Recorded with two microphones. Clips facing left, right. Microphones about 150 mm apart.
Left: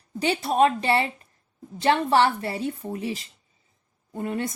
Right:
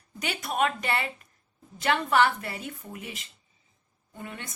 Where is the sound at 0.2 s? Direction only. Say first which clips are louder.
Left 7 dB; 30° left (ahead or behind).